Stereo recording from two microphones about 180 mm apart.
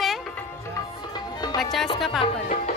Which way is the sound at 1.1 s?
25° left (ahead or behind).